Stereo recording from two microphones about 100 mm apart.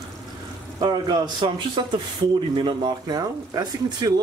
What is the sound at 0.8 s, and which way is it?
Speech, 45° right (ahead or behind).